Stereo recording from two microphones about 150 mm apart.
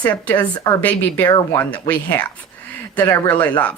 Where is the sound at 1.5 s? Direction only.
10° left (ahead or behind).